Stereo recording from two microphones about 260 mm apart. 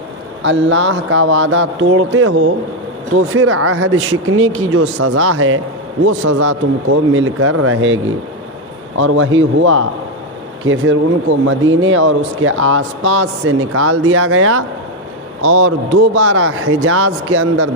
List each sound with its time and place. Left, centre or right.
0.4 s speech: right